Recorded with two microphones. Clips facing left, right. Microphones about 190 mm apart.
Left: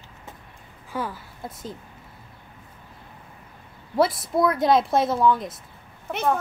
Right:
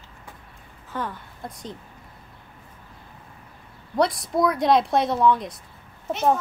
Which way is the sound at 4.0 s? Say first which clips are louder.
Left 1 dB; centre (ahead or behind).